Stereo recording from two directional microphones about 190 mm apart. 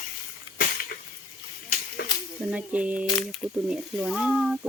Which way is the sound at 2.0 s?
55° left (ahead or behind).